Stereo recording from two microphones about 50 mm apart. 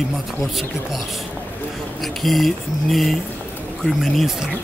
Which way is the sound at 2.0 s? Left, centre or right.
Centre.